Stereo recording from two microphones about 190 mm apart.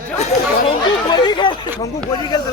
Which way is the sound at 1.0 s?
25° left (ahead or behind).